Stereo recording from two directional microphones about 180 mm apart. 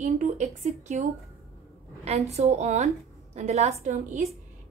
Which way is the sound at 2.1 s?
35° right (ahead or behind).